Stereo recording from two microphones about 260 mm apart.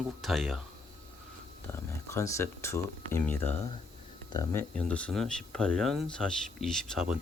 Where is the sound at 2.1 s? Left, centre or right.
Centre.